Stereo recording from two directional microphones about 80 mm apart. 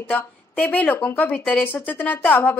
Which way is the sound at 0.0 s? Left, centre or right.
Left.